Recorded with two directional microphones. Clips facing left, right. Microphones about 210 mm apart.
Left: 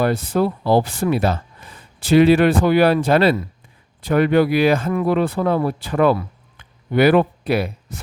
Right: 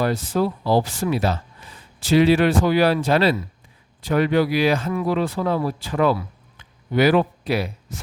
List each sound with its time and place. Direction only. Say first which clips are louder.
0.0 s speech: left 3 dB; 60° left (ahead or behind)